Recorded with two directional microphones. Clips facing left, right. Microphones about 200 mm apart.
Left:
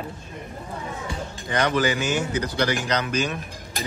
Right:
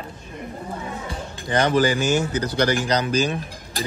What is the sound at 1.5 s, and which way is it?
A man's voice, 35° right (ahead or behind).